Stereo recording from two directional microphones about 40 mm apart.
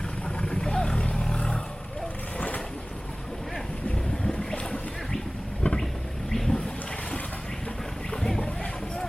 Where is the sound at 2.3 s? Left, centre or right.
Left.